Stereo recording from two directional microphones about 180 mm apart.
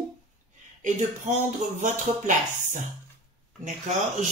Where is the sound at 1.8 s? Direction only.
45° right (ahead or behind).